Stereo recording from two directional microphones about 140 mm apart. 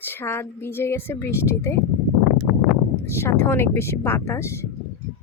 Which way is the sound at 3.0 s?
20° left (ahead or behind).